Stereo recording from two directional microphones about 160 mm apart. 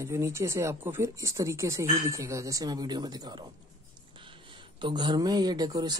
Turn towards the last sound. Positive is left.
turn(degrees=-25)  # may be behind; listen again after turning